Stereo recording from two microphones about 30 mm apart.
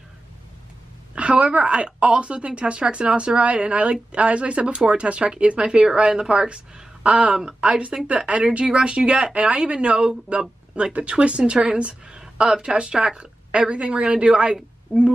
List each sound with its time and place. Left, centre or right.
1.1 s a woman's voice: right
11.5 s speech: right
12.1 s a sound: right
12.9 s a woman's voice: right